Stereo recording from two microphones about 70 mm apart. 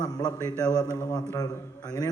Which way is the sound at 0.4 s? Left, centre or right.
Right.